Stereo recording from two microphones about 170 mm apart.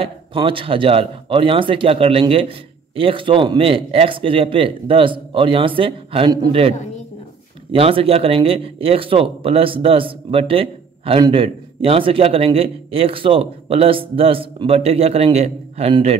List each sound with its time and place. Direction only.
0.0 s a man's voice: 30° right (ahead or behind)
7.7 s a man's voice: 35° right (ahead or behind)